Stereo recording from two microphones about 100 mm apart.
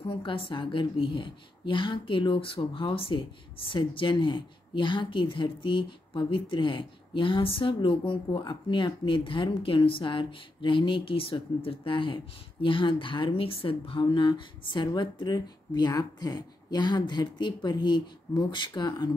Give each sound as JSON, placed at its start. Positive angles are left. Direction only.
{"t": 0.1, "sound": "a woman's voice", "side_deg": 60}